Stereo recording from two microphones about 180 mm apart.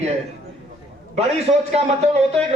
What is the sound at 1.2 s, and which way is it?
Speech, 35° right (ahead or behind).